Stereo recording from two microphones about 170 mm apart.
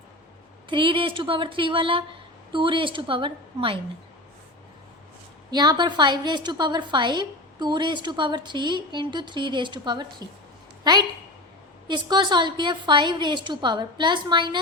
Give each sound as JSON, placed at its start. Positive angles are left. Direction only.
{"t": 0.7, "sound": "a woman's voice", "side_deg": -30}
{"t": 5.5, "sound": "a woman's voice", "side_deg": -25}